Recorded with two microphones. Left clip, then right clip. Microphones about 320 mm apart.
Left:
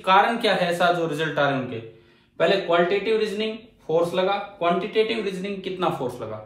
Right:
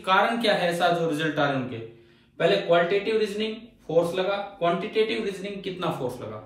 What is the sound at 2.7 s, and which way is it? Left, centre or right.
Speech, centre.